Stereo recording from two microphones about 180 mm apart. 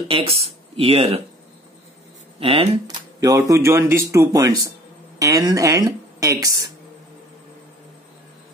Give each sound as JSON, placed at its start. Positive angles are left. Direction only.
{"t": 0.1, "sound": "speech", "side_deg": -35}
{"t": 2.4, "sound": "speech", "side_deg": -30}